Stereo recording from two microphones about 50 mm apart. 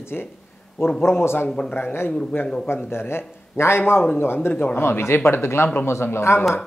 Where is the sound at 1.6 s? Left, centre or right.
Left.